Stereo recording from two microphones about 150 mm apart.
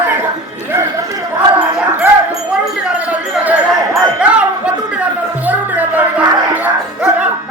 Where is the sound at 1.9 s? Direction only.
5° right (ahead or behind).